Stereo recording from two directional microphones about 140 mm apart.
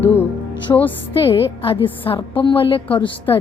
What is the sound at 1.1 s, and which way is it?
A woman's voice, 40° left (ahead or behind).